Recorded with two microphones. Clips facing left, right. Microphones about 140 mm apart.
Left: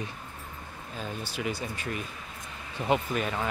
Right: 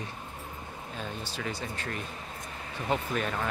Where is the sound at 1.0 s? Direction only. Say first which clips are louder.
Left 3 dB; 10° left (ahead or behind).